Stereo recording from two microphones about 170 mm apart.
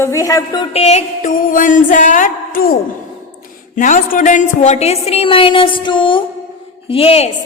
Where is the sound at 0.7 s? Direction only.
40° left (ahead or behind).